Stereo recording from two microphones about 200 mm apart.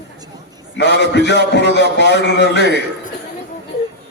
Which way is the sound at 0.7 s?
60° left (ahead or behind).